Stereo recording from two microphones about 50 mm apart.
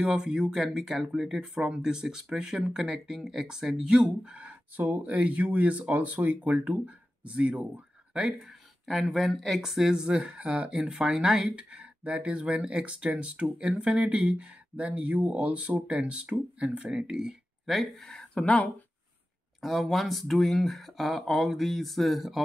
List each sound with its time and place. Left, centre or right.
0.0 s speech: centre
0.6 s speech: centre; by 4.6 s right
4.7 s speech: right
8.4 s speech: centre
9.9 s speech: right
17.6 s speech: centre
18.3 s speech: left
19.6 s speech: centre